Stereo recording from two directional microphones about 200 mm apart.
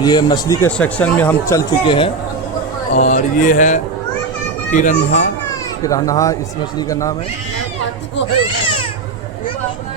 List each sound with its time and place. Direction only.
0.0 s speech: 20° left (ahead or behind)
1.8 s speech: 25° left (ahead or behind)
5.8 s speech: 15° left (ahead or behind)
8.4 s a sound: 25° left (ahead or behind)